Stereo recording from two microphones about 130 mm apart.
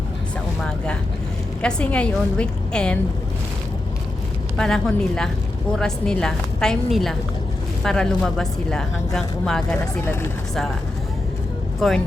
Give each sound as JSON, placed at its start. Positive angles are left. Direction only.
{"t": 1.6, "sound": "a woman's voice", "side_deg": 10}
{"t": 4.5, "sound": "speech", "side_deg": 5}
{"t": 10.0, "sound": "speech", "side_deg": 20}
{"t": 11.8, "sound": "speech", "side_deg": 0}